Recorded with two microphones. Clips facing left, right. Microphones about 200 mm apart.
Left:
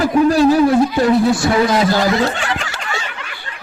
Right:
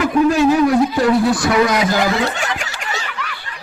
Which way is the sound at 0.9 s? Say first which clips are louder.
Left 1 dB; 25° left (ahead or behind).